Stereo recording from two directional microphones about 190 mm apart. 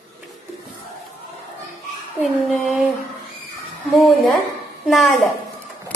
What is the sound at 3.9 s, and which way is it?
Child singing, centre (ahead or behind).